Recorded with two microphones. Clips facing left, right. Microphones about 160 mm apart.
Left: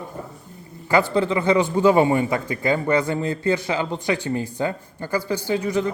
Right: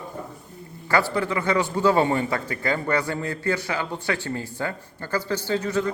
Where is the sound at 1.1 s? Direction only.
20° left (ahead or behind).